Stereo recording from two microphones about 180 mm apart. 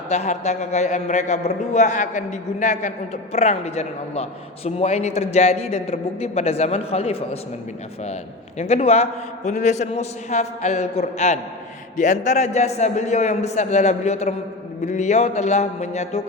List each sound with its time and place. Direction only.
0.1 s a man's voice: 40° left (ahead or behind)
8.5 s a man's voice: 35° left (ahead or behind)